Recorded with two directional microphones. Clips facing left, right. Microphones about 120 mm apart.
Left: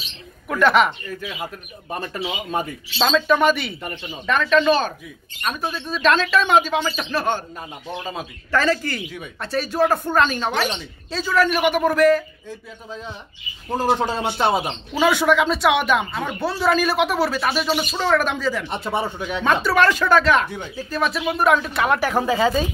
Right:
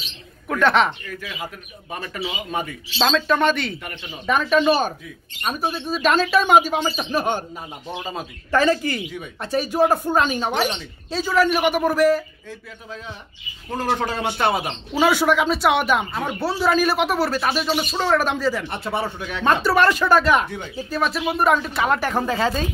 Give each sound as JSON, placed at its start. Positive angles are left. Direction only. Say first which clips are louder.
{"t": 0.5, "sound": "speech", "louder": "left 1 dB", "side_deg": 5}
{"t": 3.0, "sound": "speech", "louder": "left 1 dB", "side_deg": 0}
{"t": 4.3, "sound": "speech", "louder": "even", "side_deg": -10}
{"t": 7.9, "sound": "speech", "louder": "even", "side_deg": 0}
{"t": 8.5, "sound": "speech", "louder": "right 2 dB", "side_deg": -20}
{"t": 13.8, "sound": "speech", "louder": "left 2 dB", "side_deg": 25}
{"t": 15.0, "sound": "speech", "louder": "even", "side_deg": -5}
{"t": 18.7, "sound": "speech", "louder": "left 1 dB", "side_deg": 20}
{"t": 19.4, "sound": "speech", "louder": "right 1 dB", "side_deg": 0}